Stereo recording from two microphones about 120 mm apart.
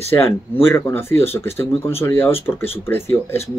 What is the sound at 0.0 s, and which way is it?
Speech, 20° left (ahead or behind).